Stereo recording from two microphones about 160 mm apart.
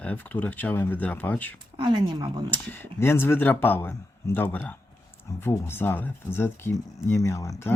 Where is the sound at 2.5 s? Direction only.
15° left (ahead or behind).